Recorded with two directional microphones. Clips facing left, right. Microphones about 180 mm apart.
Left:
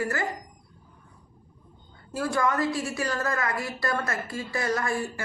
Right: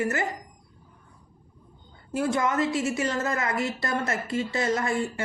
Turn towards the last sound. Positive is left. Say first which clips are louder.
# right 2 dB
turn(degrees=-20)  # may be behind; listen again after turning